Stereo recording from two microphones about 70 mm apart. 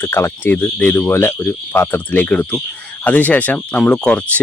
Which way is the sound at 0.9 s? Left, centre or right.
Left.